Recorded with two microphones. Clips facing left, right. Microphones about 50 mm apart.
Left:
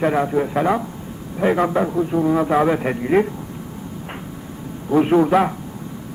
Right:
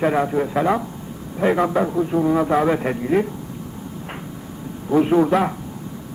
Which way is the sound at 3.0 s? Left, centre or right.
Left.